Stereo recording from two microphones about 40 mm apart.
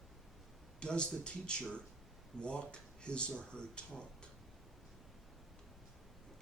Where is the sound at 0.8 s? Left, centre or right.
Left.